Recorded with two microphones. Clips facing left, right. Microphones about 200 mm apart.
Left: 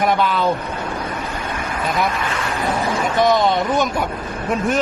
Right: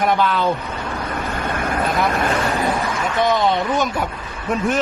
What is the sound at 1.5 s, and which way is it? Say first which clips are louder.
Speech: right 1 dB; 50° right (ahead or behind).